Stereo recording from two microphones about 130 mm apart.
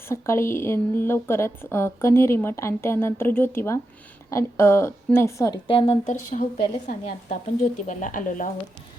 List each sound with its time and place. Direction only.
0.1 s speech: 20° left (ahead or behind)
5.6 s a woman's voice: 45° left (ahead or behind)
6.3 s speech: 75° left (ahead or behind)